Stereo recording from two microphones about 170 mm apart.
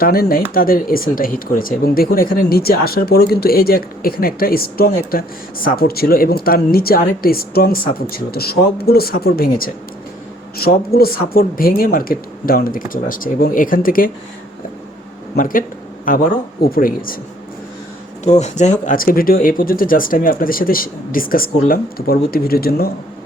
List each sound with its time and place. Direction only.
0.0 s speech: 60° left (ahead or behind)
15.4 s speech: 55° left (ahead or behind)
18.3 s speech: 45° left (ahead or behind); by 22.9 s 60° left (ahead or behind)